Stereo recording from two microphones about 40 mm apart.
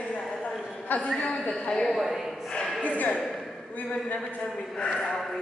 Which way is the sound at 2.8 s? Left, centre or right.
Left.